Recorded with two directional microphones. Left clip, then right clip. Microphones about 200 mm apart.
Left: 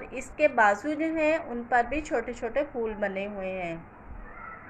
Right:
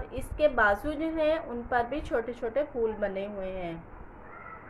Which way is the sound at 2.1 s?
5° left (ahead or behind).